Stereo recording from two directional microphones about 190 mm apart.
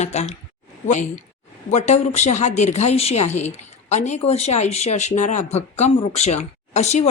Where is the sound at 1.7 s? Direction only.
35° left (ahead or behind).